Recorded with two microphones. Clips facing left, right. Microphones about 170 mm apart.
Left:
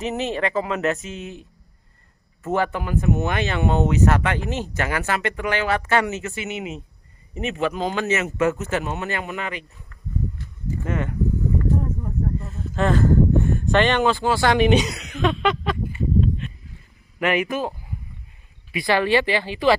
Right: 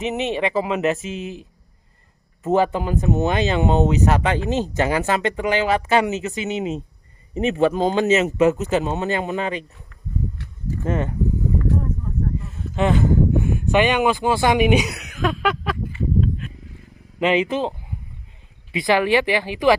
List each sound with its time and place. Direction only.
0.0 s speech: 20° right (ahead or behind)
2.4 s speech: 20° right (ahead or behind)
10.8 s speech: 25° right (ahead or behind)
12.7 s speech: 10° right (ahead or behind)
17.2 s speech: 20° right (ahead or behind)